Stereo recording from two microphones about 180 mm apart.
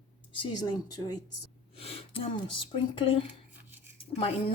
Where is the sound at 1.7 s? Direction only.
35° left (ahead or behind).